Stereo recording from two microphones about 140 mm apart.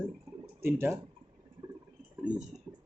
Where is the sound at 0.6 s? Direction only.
15° right (ahead or behind).